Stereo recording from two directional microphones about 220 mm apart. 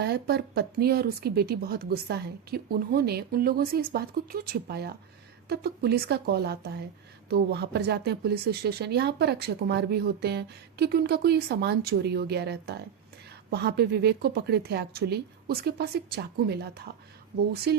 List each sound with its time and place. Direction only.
0.0 s speech: 45° right (ahead or behind)